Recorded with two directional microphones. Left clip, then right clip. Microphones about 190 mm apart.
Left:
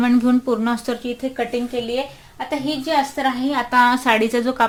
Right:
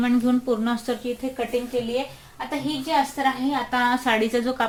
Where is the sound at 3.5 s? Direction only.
30° left (ahead or behind).